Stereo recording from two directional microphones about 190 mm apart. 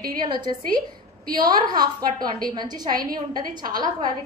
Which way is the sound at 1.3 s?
20° right (ahead or behind).